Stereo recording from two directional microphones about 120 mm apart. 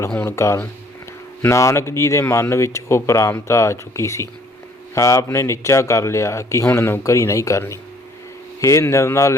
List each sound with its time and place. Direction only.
0.2 s speech: 20° left (ahead or behind)